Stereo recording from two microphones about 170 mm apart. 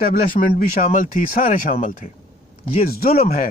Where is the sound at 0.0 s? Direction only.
55° left (ahead or behind).